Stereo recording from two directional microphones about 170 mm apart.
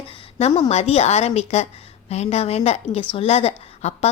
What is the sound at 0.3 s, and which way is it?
A woman's voice, 40° left (ahead or behind).